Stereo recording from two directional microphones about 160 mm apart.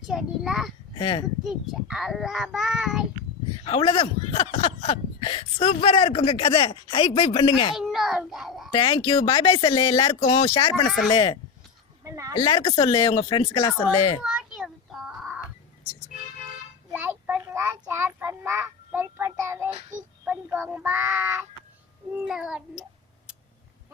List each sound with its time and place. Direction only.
0.1 s a child's voice: centre (ahead or behind)
0.9 s speech: 30° left (ahead or behind)
1.5 s a child's voice: 5° right (ahead or behind)
3.6 s speech: 35° left (ahead or behind)
7.8 s a child's voice: centre (ahead or behind)
8.7 s speech: 30° left (ahead or behind)
12.0 s a sound: 20° right (ahead or behind)
12.4 s speech: 30° left (ahead or behind)
14.2 s a sound: 5° right (ahead or behind)
16.9 s child singing: 10° right (ahead or behind)
20.2 s a child's voice: 10° right (ahead or behind)
22.1 s a child's voice: 5° right (ahead or behind)